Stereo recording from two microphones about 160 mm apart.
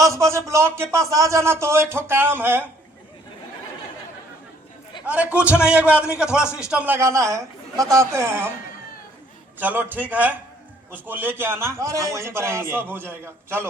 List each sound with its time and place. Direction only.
0.0 s a man's voice: 20° right (ahead or behind)
5.0 s a man's voice: 10° right (ahead or behind)
6.4 s speech: 15° left (ahead or behind)
6.7 s a man's voice: 10° right (ahead or behind)
9.6 s a man's voice: 10° right (ahead or behind)